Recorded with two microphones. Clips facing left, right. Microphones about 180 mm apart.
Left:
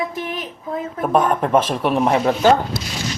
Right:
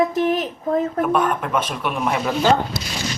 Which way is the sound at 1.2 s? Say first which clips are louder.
Left 4 dB; 35° left (ahead or behind).